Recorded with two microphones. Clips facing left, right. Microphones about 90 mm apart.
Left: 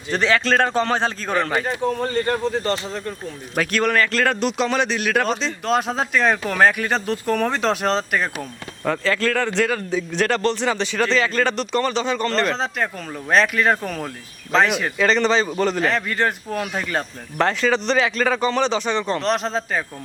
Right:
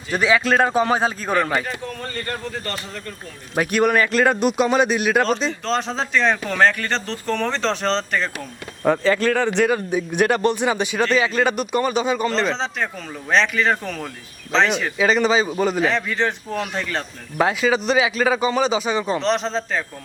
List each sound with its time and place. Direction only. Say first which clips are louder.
0.1 s a man's voice: right 1 dB; 10° right (ahead or behind)
1.6 s speech: left 7 dB; 25° left (ahead or behind)
3.5 s a man's voice: right 2 dB; 15° right (ahead or behind)
5.6 s speech: left 5 dB; 5° left (ahead or behind)
8.8 s a man's voice: right 3 dB; 15° right (ahead or behind); by 17.1 s 5° left (ahead or behind)
17.3 s a man's voice: right 1 dB; 5° right (ahead or behind)